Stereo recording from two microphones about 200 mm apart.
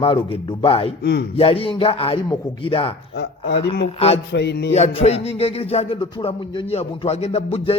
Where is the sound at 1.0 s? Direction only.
55° left (ahead or behind).